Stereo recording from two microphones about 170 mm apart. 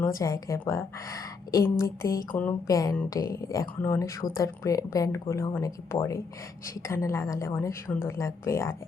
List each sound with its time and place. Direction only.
0.0 s a woman's voice: 20° left (ahead or behind)